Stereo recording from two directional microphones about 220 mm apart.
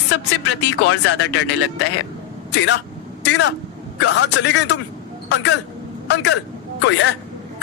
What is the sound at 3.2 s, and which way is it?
Speech, 55° left (ahead or behind).